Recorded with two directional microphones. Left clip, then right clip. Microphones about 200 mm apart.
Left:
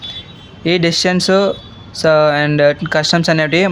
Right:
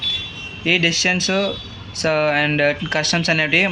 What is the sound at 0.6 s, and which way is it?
Speech, 60° left (ahead or behind).